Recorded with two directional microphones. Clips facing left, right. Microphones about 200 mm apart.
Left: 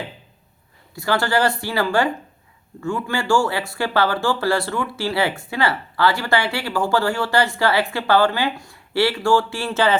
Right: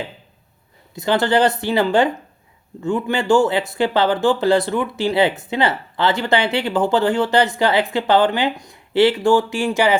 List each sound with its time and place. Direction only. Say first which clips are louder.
0.9 s speech: right 4 dB; 20° right (ahead or behind)